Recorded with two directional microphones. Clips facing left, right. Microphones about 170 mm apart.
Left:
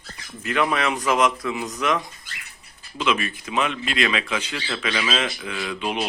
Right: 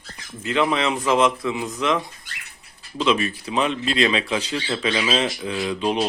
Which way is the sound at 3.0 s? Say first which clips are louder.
Right 3 dB; 35° right (ahead or behind).